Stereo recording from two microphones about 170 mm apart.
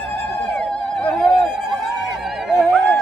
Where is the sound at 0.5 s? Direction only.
5° left (ahead or behind).